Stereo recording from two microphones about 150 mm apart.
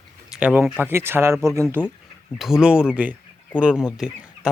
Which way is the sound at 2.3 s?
5° right (ahead or behind).